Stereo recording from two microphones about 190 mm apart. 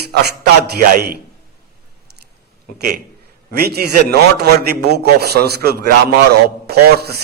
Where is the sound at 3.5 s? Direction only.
55° right (ahead or behind).